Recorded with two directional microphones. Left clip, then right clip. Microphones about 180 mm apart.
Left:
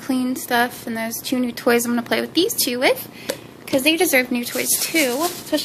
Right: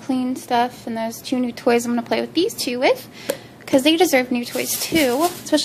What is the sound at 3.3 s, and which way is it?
Speech, 25° right (ahead or behind).